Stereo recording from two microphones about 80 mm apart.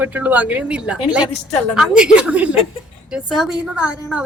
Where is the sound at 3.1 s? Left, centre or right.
Centre.